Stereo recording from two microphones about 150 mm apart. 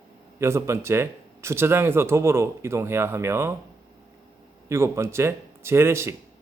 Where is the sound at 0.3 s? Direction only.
20° right (ahead or behind).